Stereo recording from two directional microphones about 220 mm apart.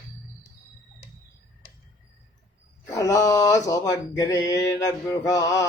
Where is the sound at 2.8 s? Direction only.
15° left (ahead or behind).